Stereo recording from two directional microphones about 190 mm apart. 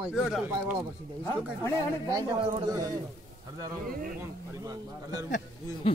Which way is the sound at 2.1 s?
20° right (ahead or behind).